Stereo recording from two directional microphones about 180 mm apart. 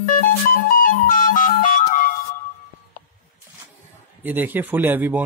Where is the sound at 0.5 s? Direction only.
50° left (ahead or behind).